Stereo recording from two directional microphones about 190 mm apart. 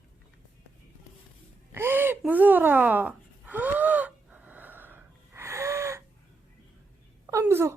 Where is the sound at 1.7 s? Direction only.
10° right (ahead or behind).